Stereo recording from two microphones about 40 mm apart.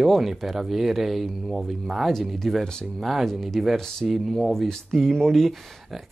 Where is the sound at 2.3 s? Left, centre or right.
Centre.